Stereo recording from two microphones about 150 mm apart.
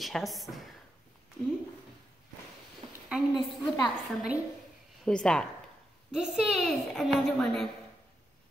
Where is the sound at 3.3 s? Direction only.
25° left (ahead or behind).